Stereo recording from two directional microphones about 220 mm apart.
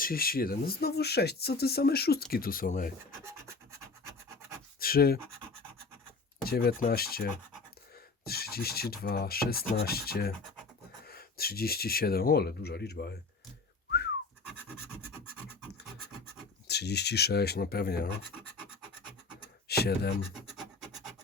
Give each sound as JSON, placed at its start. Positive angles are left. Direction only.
{"t": 0.0, "sound": "speech", "side_deg": 40}
{"t": 4.8, "sound": "speech", "side_deg": 45}
{"t": 6.4, "sound": "speech", "side_deg": 45}
{"t": 16.6, "sound": "speech", "side_deg": 50}
{"t": 19.6, "sound": "a sound", "side_deg": 45}
{"t": 20.6, "sound": "filing", "side_deg": 0}